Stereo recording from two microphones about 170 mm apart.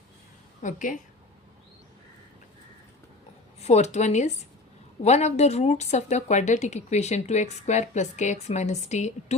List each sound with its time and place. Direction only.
0.6 s a woman's voice: 50° left (ahead or behind)
3.6 s speech: 40° left (ahead or behind)